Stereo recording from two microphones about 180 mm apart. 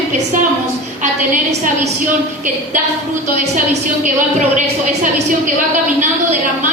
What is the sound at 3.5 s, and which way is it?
Speech, 45° right (ahead or behind).